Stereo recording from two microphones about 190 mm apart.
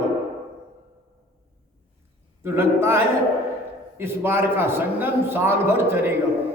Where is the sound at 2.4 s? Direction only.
15° right (ahead or behind).